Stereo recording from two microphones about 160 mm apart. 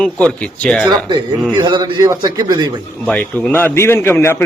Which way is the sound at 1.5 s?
25° right (ahead or behind).